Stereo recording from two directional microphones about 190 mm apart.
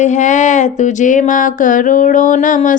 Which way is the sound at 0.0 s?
40° left (ahead or behind).